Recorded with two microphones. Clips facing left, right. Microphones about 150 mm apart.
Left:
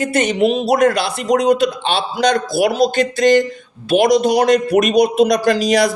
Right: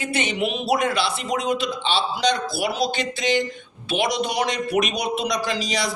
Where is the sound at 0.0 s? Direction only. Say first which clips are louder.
Left 9 dB; 45° left (ahead or behind).